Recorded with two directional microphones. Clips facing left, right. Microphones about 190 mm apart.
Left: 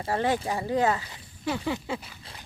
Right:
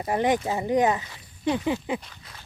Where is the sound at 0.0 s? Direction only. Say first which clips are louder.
Right 3 dB; 15° right (ahead or behind).